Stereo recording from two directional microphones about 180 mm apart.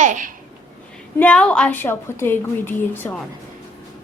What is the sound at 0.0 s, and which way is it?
Speech, 45° right (ahead or behind).